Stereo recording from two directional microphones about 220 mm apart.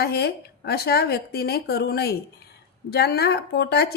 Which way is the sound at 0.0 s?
45° left (ahead or behind).